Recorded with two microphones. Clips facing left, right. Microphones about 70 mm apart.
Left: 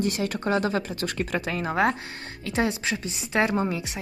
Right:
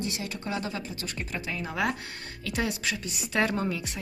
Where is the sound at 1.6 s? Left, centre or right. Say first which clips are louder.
Left 6 dB; left.